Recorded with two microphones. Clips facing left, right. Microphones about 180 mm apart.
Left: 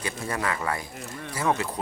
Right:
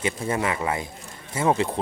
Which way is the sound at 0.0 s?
20° right (ahead or behind).